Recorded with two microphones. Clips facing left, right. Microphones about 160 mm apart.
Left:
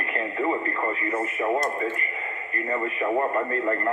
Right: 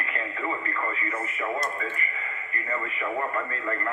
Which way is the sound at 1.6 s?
35° left (ahead or behind).